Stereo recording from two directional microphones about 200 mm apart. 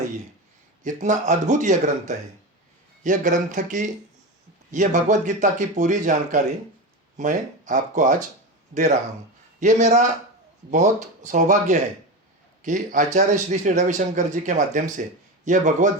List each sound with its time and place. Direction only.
0.9 s speech: 35° right (ahead or behind)
9.6 s speech: 35° right (ahead or behind)